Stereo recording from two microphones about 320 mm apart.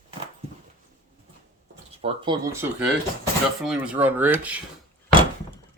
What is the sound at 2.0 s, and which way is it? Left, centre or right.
Speech, centre.